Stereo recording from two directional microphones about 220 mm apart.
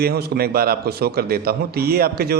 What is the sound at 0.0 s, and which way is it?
A man's voice, 45° right (ahead or behind).